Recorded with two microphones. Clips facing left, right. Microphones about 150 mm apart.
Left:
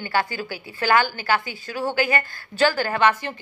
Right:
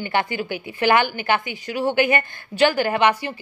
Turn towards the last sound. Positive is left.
turn(degrees=-15)  # may be behind; listen again after turning